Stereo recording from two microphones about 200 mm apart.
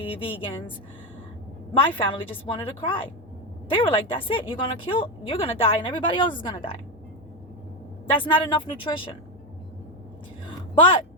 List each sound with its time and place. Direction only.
0.0 s a woman's voice: 25° left (ahead or behind)
1.9 s a woman's voice: 25° left (ahead or behind)
8.2 s a woman's voice: 25° left (ahead or behind)
10.4 s a sound: 25° left (ahead or behind)